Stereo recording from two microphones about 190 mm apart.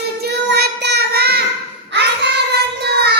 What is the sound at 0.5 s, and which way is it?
Child singing, 60° right (ahead or behind).